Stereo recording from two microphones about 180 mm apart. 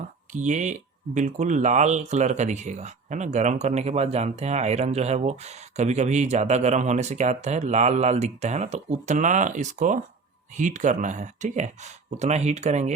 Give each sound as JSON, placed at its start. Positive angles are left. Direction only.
{"t": 0.3, "sound": "speech", "side_deg": -40}